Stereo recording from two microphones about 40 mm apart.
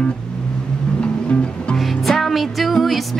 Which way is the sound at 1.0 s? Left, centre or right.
Left.